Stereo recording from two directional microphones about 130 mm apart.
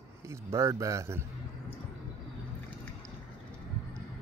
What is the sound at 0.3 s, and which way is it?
Speech, 20° right (ahead or behind).